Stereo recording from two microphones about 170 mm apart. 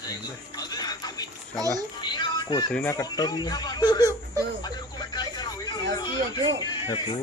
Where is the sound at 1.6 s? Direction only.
20° right (ahead or behind).